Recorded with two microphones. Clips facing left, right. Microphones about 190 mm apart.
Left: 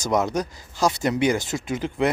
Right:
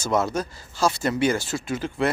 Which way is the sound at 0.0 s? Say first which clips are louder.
Left 1 dB; 15° left (ahead or behind).